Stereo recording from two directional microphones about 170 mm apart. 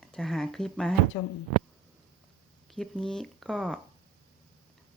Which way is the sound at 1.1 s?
20° left (ahead or behind).